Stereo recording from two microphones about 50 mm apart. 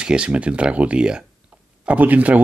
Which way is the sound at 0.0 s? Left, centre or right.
Right.